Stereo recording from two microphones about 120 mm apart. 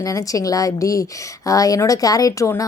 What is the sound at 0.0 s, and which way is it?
Speech, 30° left (ahead or behind).